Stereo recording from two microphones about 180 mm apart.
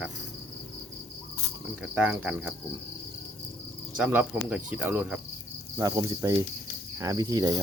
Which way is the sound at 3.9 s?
10° right (ahead or behind).